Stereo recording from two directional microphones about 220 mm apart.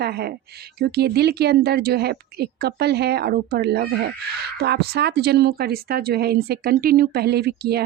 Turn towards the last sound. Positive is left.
turn(degrees=-45)  # may be behind; listen again after turning